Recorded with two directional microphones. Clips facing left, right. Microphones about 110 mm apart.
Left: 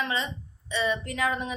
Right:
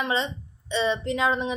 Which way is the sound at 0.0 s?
30° right (ahead or behind).